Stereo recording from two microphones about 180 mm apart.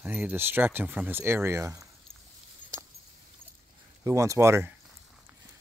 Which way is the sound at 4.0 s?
15° right (ahead or behind).